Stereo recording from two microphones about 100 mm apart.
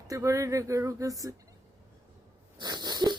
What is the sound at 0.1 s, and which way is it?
Speech, 30° right (ahead or behind).